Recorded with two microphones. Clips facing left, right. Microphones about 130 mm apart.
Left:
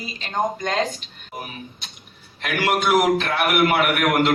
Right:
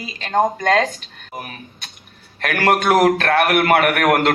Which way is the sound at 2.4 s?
55° right (ahead or behind).